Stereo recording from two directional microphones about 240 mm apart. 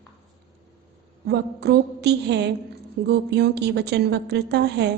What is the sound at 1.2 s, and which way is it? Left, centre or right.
A woman's voice, right.